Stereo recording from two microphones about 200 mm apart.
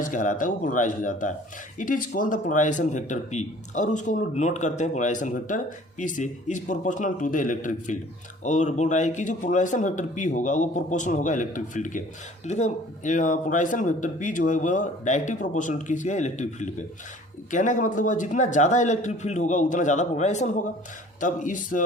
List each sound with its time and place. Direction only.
0.0 s speech: 40° left (ahead or behind)